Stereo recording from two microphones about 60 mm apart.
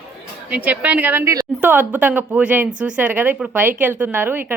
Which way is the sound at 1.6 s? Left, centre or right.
Right.